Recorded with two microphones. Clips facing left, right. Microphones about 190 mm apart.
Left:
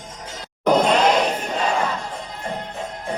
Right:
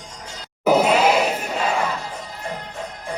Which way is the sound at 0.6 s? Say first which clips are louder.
Even; 5° right (ahead or behind).